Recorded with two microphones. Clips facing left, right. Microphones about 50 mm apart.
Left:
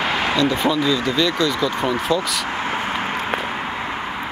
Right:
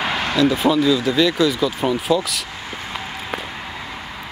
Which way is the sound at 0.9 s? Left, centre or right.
Centre.